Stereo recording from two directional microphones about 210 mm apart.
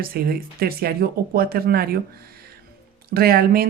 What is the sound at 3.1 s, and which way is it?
Speech, 45° right (ahead or behind).